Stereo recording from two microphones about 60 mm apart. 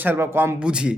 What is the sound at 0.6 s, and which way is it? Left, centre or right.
Speech, centre.